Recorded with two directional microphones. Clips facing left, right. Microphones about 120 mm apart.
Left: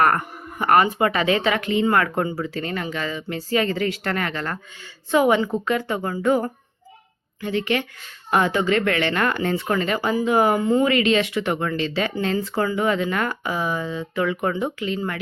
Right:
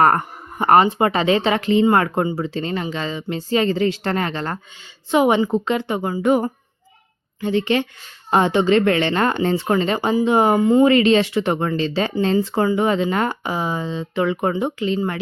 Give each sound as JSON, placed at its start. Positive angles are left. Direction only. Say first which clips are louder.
{"t": 0.0, "sound": "speech", "louder": "right 3 dB", "side_deg": -30}
{"t": 7.4, "sound": "speech", "louder": "right 4 dB", "side_deg": -30}